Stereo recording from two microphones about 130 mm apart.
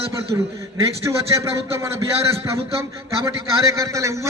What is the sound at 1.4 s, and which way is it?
Speech, 20° right (ahead or behind).